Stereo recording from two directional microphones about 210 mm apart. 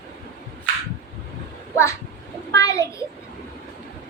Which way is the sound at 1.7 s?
15° left (ahead or behind).